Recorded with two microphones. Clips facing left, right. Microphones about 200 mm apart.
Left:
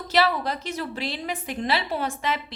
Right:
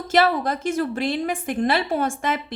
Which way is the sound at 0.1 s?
50° right (ahead or behind).